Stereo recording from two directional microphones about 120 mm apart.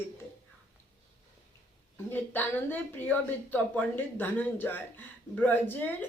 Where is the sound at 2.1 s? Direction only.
15° left (ahead or behind).